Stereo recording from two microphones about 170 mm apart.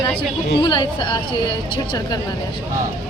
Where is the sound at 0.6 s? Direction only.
25° left (ahead or behind).